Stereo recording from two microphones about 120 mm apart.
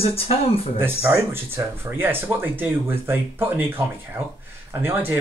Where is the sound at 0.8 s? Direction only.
15° right (ahead or behind).